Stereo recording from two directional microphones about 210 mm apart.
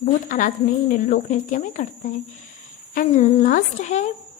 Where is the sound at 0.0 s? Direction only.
40° left (ahead or behind).